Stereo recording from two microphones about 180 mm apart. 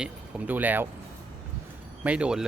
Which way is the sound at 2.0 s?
5° right (ahead or behind).